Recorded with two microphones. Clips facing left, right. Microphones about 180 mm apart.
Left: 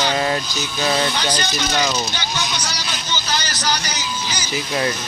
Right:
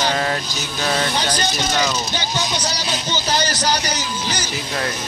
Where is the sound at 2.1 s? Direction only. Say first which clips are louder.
Right 2 dB; 40° right (ahead or behind).